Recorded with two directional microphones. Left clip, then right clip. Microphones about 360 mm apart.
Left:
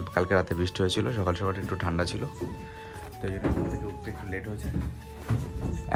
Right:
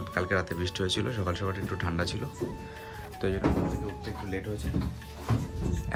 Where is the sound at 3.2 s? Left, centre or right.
Right.